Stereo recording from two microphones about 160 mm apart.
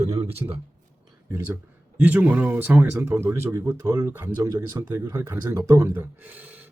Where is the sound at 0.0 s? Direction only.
40° right (ahead or behind).